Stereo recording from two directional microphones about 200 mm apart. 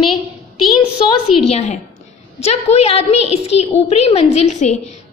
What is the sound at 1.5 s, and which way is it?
A woman's voice, 30° left (ahead or behind).